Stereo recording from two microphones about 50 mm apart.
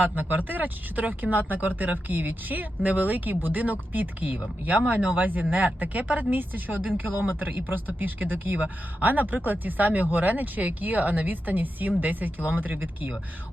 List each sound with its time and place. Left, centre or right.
0.0 s speech: right